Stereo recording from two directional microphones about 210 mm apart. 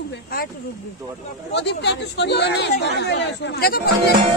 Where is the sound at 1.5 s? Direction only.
55° left (ahead or behind).